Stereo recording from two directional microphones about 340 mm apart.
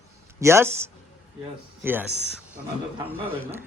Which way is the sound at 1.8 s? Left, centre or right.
Centre.